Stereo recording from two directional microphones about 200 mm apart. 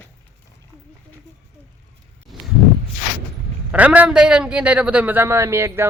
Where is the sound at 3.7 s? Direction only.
5° right (ahead or behind).